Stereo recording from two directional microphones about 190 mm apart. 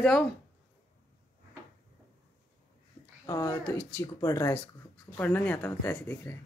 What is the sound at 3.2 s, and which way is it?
Speech, 15° left (ahead or behind).